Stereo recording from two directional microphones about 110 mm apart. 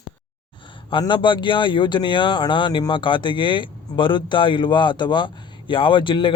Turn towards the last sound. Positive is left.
turn(degrees=50)  # may be behind; listen again after turning